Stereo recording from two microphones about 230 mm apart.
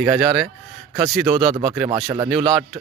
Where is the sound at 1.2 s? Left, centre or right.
Right.